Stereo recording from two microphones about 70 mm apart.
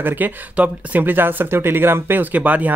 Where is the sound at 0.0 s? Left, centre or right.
Right.